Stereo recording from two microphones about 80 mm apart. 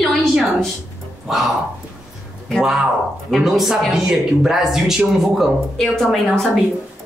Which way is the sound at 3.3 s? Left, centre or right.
Centre.